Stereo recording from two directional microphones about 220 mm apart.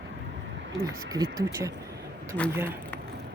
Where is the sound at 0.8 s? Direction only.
15° right (ahead or behind).